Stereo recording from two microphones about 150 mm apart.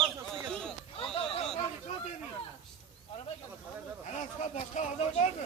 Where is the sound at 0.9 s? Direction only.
40° left (ahead or behind).